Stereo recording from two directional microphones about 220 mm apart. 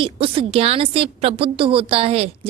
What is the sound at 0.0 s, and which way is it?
A woman's voice, 25° right (ahead or behind).